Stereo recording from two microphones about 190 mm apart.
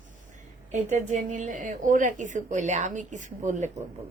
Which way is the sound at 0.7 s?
40° right (ahead or behind).